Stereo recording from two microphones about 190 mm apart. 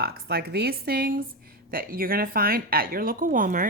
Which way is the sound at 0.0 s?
55° right (ahead or behind).